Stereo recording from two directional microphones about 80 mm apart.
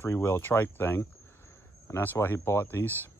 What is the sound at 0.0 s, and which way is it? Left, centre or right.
Speech, left.